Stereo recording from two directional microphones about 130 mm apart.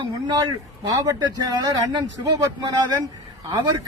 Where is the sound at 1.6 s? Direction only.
35° right (ahead or behind).